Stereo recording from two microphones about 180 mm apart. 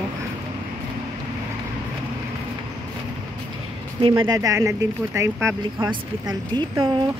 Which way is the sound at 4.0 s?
25° right (ahead or behind).